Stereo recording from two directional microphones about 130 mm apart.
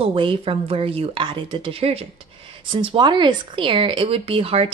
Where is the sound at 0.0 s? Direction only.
45° right (ahead or behind).